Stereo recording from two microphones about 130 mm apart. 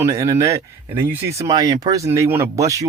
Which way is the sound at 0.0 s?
25° right (ahead or behind).